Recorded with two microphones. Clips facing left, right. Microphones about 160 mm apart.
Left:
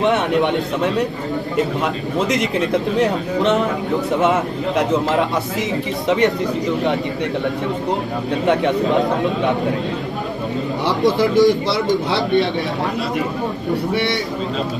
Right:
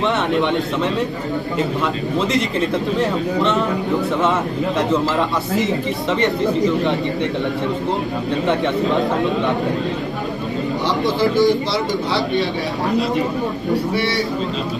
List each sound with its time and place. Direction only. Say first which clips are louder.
0.0 s a man's voice: left 2 dB; 15° left (ahead or behind)
11.1 s speech: left 1 dB; 65° left (ahead or behind)